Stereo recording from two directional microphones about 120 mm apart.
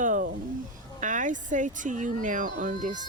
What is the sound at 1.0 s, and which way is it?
Speech, 90° right.